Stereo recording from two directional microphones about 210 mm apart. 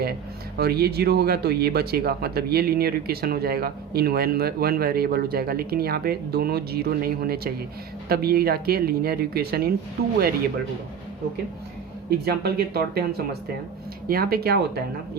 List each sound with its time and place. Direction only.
0.6 s speech: 50° right (ahead or behind)
12.1 s speech: 50° right (ahead or behind)